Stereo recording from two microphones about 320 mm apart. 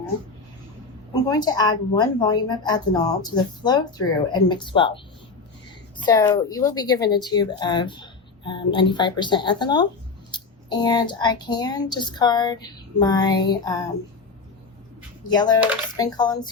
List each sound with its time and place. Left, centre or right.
1.1 s a woman's voice: centre
6.1 s a woman's voice: centre
15.3 s a woman's voice: centre